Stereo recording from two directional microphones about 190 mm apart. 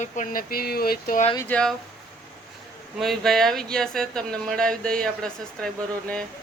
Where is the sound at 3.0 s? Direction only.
Centre (ahead or behind).